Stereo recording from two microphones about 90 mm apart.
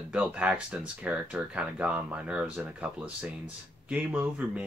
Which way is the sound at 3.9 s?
15° right (ahead or behind).